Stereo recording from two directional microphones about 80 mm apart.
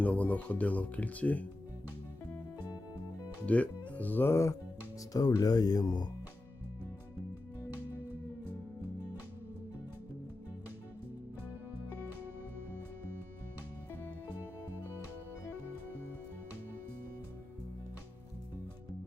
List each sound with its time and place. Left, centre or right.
0.0 s speech: centre
3.4 s speech: centre
5.1 s speech: left